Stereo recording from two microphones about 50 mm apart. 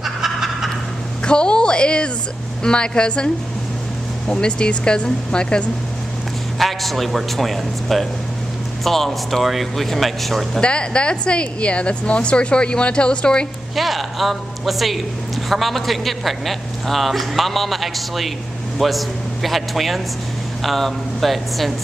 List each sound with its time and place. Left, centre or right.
0.0 s fowl: centre
1.2 s a woman's voice: centre
4.3 s a woman's voice: centre
6.6 s a man's voice: centre
10.6 s a woman's voice: centre
13.7 s a man's voice: centre